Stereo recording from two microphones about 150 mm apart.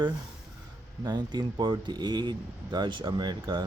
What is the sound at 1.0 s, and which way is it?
Speech, 30° right (ahead or behind).